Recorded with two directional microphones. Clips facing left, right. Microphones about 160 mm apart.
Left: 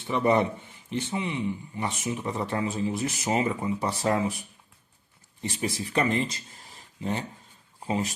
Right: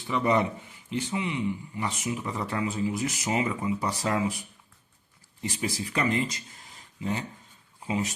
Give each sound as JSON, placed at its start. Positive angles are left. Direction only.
{"t": 0.1, "sound": "a man's voice", "side_deg": 25}